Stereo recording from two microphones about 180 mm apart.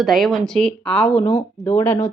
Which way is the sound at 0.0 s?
Centre (ahead or behind).